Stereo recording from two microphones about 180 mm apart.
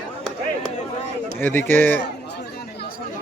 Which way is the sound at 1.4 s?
10° left (ahead or behind).